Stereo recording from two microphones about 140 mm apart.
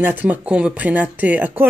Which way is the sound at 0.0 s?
10° right (ahead or behind).